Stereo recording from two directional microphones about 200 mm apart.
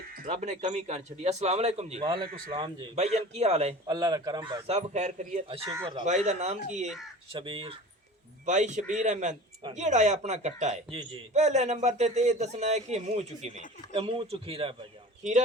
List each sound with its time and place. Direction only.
0.1 s a sound: 45° right (ahead or behind)
0.3 s a man's voice: 35° right (ahead or behind)
3.8 s a man's voice: 20° right (ahead or behind); by 5.4 s 35° right (ahead or behind)
5.5 s a man's voice: 25° right (ahead or behind)
6.1 s a man's voice: 35° right (ahead or behind)
8.4 s a man's voice: 35° right (ahead or behind)